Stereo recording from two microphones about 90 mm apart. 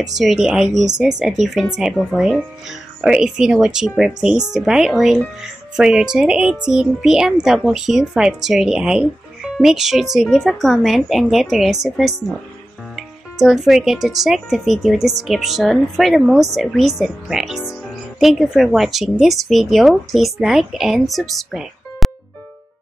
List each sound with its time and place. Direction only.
0.0 s speech: centre (ahead or behind)